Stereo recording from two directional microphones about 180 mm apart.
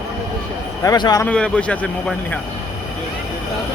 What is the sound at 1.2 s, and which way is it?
Speech, 5° left (ahead or behind).